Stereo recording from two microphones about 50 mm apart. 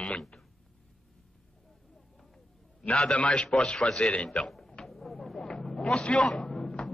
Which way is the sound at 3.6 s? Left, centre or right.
Centre.